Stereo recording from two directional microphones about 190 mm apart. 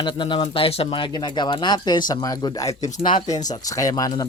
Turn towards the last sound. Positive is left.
turn(degrees=20)  # may be behind; listen again after turning